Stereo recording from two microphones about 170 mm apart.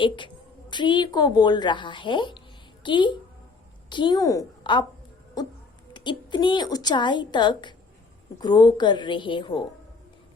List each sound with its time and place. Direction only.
0.7 s a woman's voice: 25° left (ahead or behind)
5.9 s a woman's voice: 25° left (ahead or behind)